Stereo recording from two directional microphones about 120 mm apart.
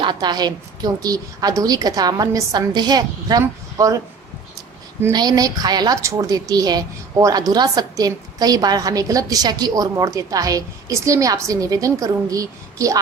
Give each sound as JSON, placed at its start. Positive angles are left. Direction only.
{"t": 0.0, "sound": "a woman's voice", "side_deg": -35}
{"t": 5.1, "sound": "a woman's voice", "side_deg": -35}